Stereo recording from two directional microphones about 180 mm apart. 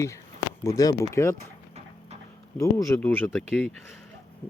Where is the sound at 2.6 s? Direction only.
15° left (ahead or behind).